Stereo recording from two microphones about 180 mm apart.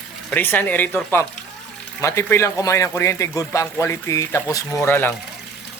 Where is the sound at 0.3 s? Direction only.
10° left (ahead or behind).